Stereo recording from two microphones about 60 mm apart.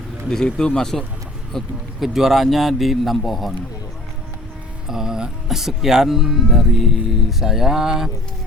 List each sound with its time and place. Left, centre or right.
0.3 s speech: centre
1.5 s speech: centre
4.9 s speech: centre